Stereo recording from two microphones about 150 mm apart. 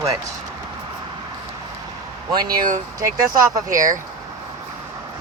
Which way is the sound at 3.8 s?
60° right (ahead or behind).